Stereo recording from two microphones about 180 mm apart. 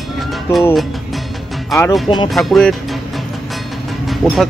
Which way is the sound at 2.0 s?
25° left (ahead or behind).